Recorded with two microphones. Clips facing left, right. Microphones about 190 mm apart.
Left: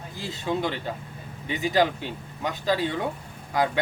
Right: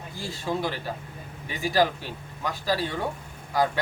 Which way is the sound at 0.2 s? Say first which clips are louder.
Left 1 dB; 20° left (ahead or behind).